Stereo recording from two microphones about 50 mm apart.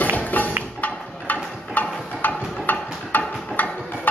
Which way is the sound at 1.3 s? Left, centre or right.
Left.